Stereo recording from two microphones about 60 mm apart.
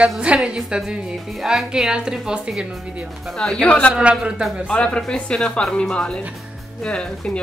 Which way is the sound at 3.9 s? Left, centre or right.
Centre.